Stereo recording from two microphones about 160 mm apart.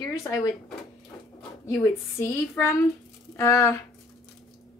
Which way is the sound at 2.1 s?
15° left (ahead or behind).